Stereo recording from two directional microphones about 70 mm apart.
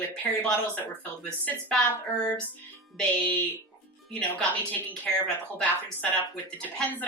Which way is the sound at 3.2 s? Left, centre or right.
Left.